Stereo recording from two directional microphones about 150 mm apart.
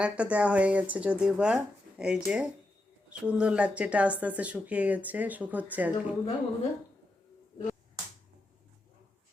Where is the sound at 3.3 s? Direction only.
5° right (ahead or behind).